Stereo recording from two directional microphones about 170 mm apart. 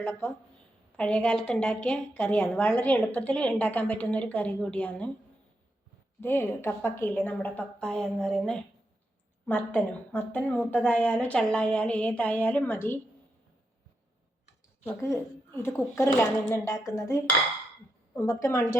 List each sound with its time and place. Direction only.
0.0 s a woman's voice: 15° left (ahead or behind)
6.1 s a woman's voice: 15° left (ahead or behind)
14.8 s a woman's voice: 15° left (ahead or behind)